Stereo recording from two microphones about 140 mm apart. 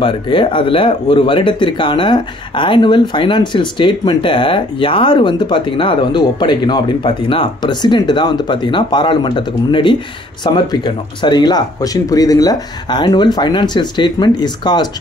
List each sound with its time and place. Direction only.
0.0 s speech: 40° left (ahead or behind)